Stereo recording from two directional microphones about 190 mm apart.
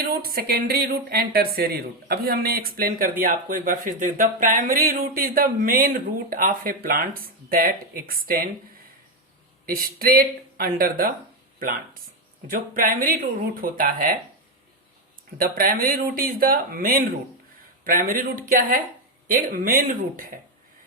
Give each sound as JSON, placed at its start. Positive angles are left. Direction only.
{"t": 0.0, "sound": "speech", "side_deg": -50}
{"t": 9.6, "sound": "speech", "side_deg": -50}
{"t": 15.4, "sound": "speech", "side_deg": -50}